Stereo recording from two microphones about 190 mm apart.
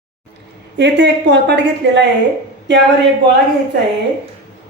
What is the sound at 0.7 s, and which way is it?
A woman's voice, 65° right (ahead or behind).